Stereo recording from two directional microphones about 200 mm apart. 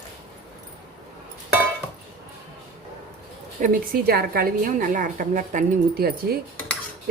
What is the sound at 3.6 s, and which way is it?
A woman's voice, 45° right (ahead or behind).